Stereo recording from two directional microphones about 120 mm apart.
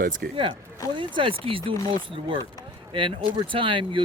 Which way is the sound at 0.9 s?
45° right (ahead or behind).